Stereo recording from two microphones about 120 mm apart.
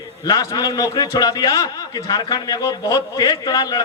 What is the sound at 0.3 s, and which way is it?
A man's voice, 30° left (ahead or behind).